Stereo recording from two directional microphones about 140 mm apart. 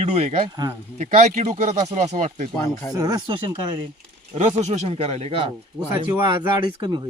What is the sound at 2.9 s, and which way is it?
Speech, 25° right (ahead or behind).